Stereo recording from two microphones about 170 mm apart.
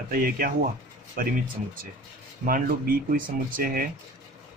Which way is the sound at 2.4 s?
55° right (ahead or behind).